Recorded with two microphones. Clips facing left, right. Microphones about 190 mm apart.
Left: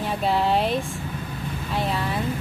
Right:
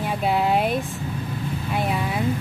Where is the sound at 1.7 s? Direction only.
10° right (ahead or behind).